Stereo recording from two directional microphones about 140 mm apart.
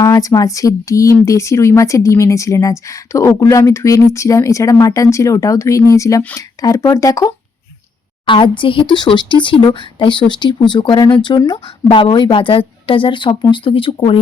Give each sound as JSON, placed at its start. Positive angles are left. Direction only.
{"t": 0.0, "sound": "speech", "side_deg": 25}
{"t": 8.3, "sound": "speech", "side_deg": 35}